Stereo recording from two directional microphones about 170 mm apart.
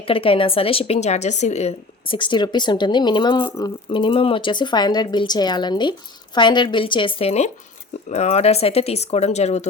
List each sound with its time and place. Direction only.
0.0 s a woman's voice: 30° left (ahead or behind)